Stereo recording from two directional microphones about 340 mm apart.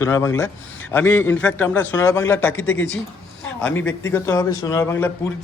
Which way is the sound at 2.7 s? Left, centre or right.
Left.